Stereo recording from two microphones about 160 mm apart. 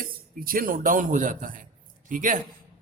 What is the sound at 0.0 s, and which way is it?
Speech, 65° right (ahead or behind).